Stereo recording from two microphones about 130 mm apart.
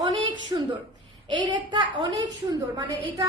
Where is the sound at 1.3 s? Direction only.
35° right (ahead or behind).